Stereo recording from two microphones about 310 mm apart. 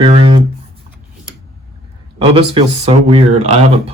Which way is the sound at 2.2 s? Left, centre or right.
Centre.